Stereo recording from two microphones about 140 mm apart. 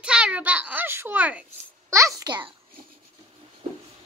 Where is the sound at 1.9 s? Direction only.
20° right (ahead or behind).